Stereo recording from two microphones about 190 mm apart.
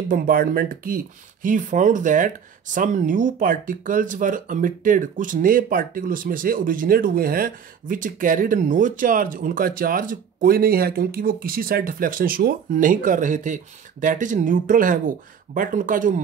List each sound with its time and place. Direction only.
0.1 s speech: 50° right (ahead or behind)